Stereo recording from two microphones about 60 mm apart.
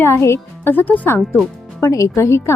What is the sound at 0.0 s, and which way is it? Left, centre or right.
Speech, left.